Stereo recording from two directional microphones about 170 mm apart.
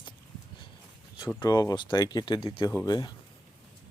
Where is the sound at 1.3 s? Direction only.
25° left (ahead or behind).